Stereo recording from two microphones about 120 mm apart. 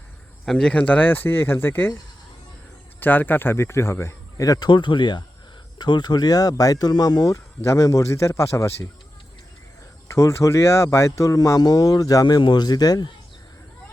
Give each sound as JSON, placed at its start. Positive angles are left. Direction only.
{"t": 0.4, "sound": "speech", "side_deg": 10}
{"t": 3.0, "sound": "speech", "side_deg": 15}
{"t": 10.2, "sound": "speech", "side_deg": 25}